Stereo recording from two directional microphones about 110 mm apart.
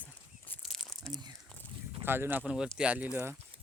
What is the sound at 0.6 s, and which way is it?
Crumpling, 5° left (ahead or behind).